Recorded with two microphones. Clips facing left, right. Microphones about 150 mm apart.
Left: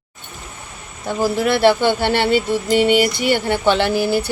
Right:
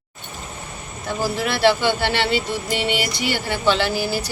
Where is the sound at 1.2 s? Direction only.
55° left (ahead or behind).